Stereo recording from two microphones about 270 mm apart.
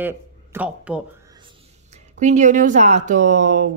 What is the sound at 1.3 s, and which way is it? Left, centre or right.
Speech, right.